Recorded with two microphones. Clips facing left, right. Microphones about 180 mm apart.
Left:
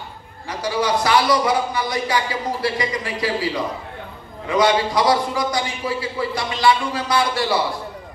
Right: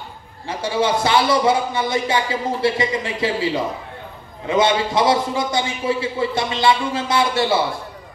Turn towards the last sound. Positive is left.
turn(degrees=-25)  # may be behind; listen again after turning